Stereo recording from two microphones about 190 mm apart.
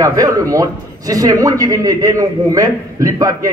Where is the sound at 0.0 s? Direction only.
20° right (ahead or behind).